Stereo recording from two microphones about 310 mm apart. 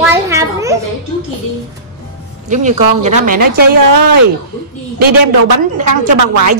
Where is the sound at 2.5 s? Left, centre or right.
Right.